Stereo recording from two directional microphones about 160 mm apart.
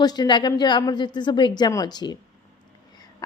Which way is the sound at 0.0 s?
25° left (ahead or behind).